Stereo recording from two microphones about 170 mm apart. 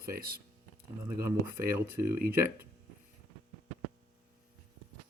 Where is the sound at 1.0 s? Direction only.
15° right (ahead or behind).